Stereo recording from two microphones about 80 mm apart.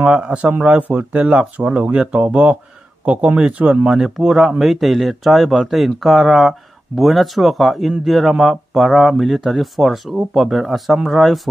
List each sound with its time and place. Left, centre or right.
0.0 s speech: centre